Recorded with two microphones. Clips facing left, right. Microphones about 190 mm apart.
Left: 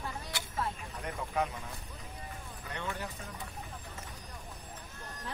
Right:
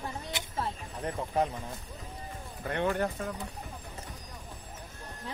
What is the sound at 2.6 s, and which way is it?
Speech, 60° right (ahead or behind).